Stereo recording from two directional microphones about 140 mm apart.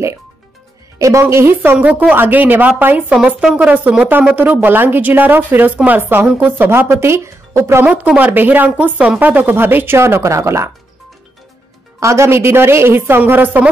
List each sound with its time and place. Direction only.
0.9 s speech: 20° right (ahead or behind)
12.0 s speech: 20° right (ahead or behind)